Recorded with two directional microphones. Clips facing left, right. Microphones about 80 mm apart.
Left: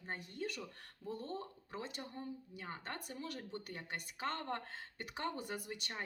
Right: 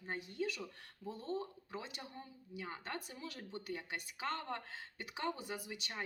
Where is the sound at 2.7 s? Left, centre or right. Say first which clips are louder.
Left 3 dB; left.